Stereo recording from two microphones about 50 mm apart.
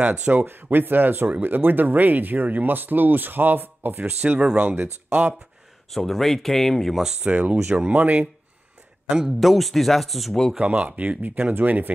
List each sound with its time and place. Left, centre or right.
0.0 s speech: right
0.3 s speech: right
4.2 s speech: right
4.6 s speech: right
5.9 s speech: centre
7.2 s speech: right
9.4 s speech: centre
10.6 s speech: right